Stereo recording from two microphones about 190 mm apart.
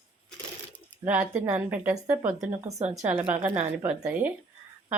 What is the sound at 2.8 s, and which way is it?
Speech, 35° right (ahead or behind).